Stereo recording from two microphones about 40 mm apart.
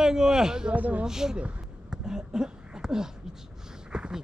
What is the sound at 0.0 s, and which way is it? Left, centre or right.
Speech, centre.